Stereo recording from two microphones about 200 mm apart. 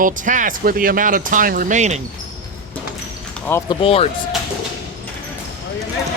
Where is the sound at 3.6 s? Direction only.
30° left (ahead or behind).